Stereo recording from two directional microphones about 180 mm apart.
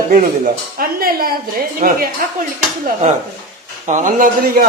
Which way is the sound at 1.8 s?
40° right (ahead or behind).